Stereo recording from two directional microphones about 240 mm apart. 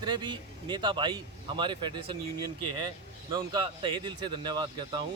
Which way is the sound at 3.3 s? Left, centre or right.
Centre.